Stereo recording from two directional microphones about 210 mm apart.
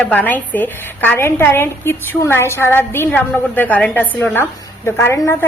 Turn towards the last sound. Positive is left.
turn(degrees=10)  # may be behind; listen again after turning